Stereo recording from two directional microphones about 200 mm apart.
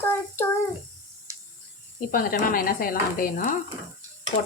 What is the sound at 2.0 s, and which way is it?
Speech, 45° left (ahead or behind).